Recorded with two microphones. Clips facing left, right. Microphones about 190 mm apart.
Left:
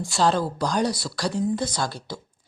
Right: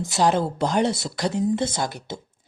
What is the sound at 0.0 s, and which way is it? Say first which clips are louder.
Speech: right 1 dB; 20° right (ahead or behind).